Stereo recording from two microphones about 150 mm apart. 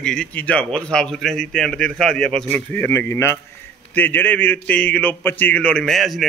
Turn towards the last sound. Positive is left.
turn(degrees=0)  # may be behind; listen again after turning